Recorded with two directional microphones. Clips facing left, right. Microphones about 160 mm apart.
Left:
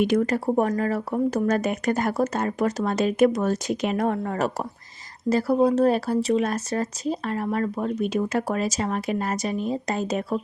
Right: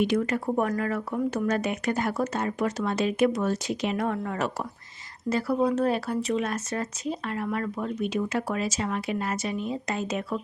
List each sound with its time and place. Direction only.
0.0 s speech: 45° left (ahead or behind)